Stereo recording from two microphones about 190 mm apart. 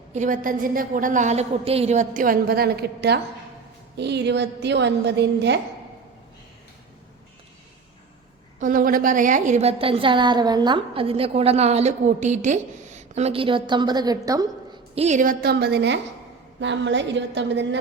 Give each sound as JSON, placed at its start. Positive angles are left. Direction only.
{"t": 0.1, "sound": "a woman's voice", "side_deg": -40}
{"t": 8.5, "sound": "a woman's voice", "side_deg": -45}
{"t": 14.9, "sound": "a woman's voice", "side_deg": -35}